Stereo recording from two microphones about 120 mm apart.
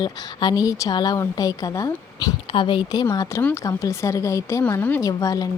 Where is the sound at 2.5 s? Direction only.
45° left (ahead or behind).